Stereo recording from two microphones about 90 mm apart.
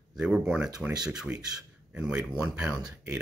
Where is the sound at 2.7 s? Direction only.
35° right (ahead or behind).